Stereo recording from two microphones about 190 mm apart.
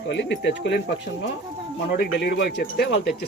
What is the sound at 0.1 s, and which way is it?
Speech, 70° left (ahead or behind).